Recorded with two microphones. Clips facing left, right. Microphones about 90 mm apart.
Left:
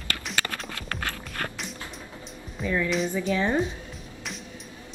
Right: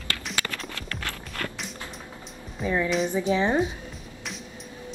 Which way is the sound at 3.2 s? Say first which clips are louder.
Right 2 dB; 25° right (ahead or behind).